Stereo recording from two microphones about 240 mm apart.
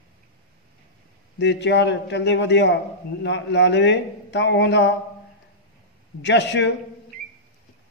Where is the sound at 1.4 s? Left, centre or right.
Left.